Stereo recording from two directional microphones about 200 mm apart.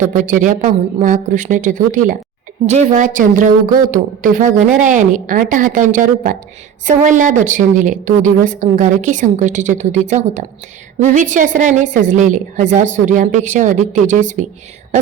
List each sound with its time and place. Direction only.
0.0 s a woman's voice: 40° right (ahead or behind)